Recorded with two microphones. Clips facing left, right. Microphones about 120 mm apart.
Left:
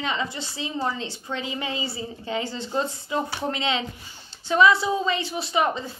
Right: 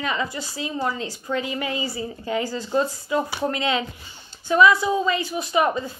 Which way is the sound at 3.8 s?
45° right (ahead or behind).